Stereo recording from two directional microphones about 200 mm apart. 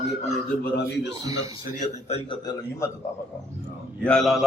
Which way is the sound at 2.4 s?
20° left (ahead or behind).